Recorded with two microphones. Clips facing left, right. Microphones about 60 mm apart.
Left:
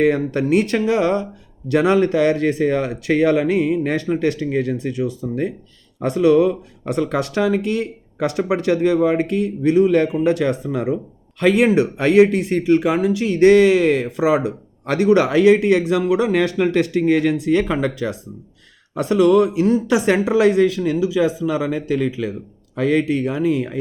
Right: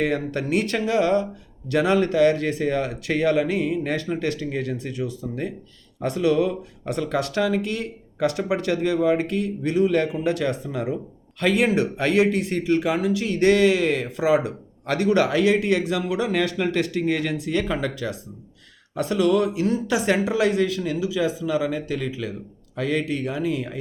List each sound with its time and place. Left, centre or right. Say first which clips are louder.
0.0 s speech: left 7 dB; left